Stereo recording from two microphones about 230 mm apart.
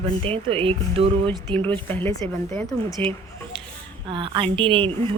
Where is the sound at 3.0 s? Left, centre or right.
Centre.